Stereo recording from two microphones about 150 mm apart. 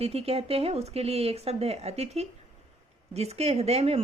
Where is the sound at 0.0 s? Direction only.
40° right (ahead or behind).